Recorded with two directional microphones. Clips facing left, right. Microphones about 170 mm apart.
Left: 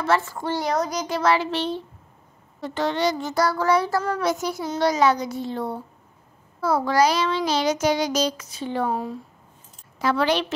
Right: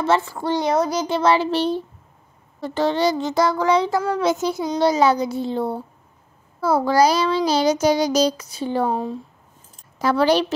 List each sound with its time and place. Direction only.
0.3 s a child's voice: 15° right (ahead or behind); by 3.3 s 30° right (ahead or behind)
3.3 s a child's voice: 20° right (ahead or behind)
8.9 s a child's voice: 25° right (ahead or behind)
9.9 s a child's voice: 40° right (ahead or behind)